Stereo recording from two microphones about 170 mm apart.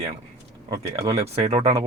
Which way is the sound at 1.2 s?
40° right (ahead or behind).